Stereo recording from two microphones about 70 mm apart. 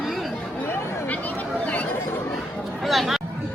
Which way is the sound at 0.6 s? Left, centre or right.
Left.